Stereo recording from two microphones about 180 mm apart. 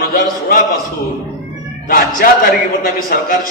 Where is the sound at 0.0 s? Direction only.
50° left (ahead or behind).